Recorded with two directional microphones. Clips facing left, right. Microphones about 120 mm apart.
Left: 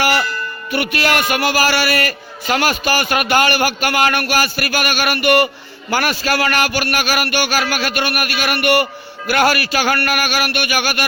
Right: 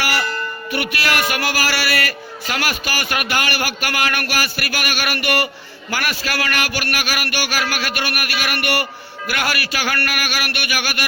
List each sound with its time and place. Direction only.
0.7 s a man's voice: 25° left (ahead or behind)
9.3 s a man's voice: 30° left (ahead or behind)